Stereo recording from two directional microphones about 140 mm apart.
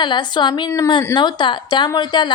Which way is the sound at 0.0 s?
30° left (ahead or behind).